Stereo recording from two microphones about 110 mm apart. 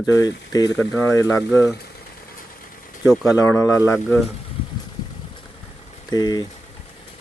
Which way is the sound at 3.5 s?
25° left (ahead or behind).